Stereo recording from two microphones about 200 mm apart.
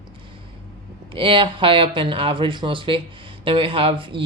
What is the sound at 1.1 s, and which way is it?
Speech, 25° right (ahead or behind).